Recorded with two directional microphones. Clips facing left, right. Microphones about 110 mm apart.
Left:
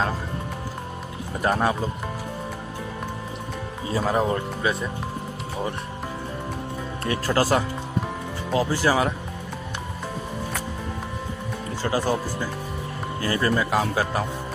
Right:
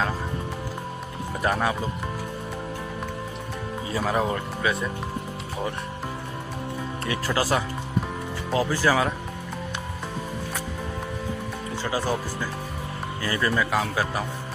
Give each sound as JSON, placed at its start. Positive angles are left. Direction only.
{"t": 1.4, "sound": "speech", "side_deg": 30}
{"t": 3.9, "sound": "speech", "side_deg": 25}
{"t": 7.1, "sound": "speech", "side_deg": 40}
{"t": 11.8, "sound": "speech", "side_deg": 45}
{"t": 13.2, "sound": "speech", "side_deg": 35}